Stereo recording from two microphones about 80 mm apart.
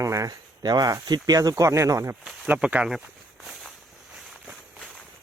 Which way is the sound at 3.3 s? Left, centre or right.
Centre.